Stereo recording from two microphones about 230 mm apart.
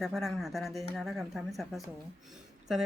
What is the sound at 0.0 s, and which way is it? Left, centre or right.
Speech, centre.